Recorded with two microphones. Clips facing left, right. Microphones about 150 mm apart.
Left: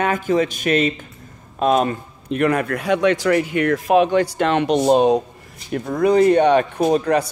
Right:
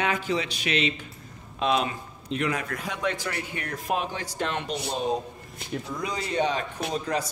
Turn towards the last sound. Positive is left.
turn(degrees=60)  # may be behind; listen again after turning